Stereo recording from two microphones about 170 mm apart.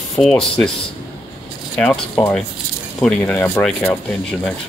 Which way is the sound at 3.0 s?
5° left (ahead or behind).